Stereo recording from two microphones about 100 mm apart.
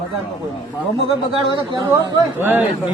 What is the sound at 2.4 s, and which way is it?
Speech, 20° right (ahead or behind).